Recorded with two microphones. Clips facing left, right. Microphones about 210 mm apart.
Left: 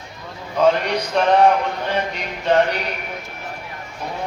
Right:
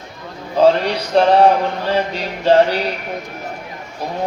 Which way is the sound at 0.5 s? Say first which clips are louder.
Right 4 dB; 30° right (ahead or behind).